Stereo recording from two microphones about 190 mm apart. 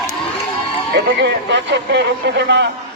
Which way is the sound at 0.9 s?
65° right (ahead or behind).